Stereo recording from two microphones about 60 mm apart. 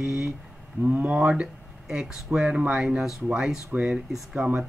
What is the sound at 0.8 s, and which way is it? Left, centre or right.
Speech, right.